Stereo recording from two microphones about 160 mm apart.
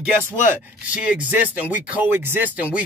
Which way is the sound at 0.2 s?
10° right (ahead or behind).